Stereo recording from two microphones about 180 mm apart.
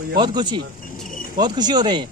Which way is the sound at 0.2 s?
25° right (ahead or behind).